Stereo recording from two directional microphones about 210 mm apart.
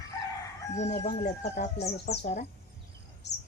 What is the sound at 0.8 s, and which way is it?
Speech, 30° left (ahead or behind).